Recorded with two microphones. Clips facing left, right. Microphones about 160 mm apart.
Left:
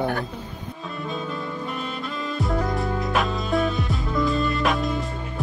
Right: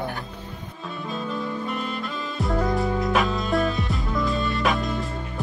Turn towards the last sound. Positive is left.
turn(degrees=0)  # may be behind; listen again after turning